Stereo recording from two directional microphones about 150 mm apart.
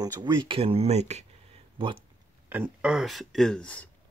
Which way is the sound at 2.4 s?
10° right (ahead or behind).